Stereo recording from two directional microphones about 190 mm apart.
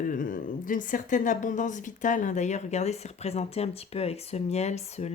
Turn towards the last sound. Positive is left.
turn(degrees=35)  # may be behind; listen again after turning